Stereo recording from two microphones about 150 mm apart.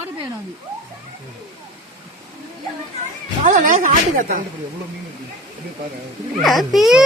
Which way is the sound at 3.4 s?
60° right (ahead or behind).